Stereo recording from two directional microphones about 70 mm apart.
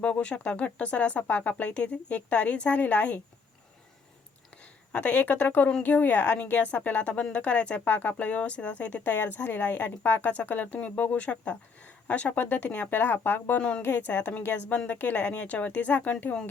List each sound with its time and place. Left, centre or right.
0.0 s a woman's voice: centre
4.6 s a woman's voice: left
13.6 s a woman's voice: centre